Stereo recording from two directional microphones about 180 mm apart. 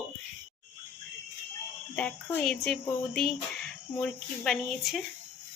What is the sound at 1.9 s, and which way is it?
A woman's voice, 5° left (ahead or behind).